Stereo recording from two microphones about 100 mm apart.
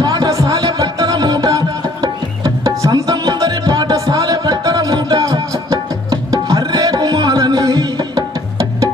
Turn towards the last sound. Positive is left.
turn(degrees=-40)  # may be behind; listen again after turning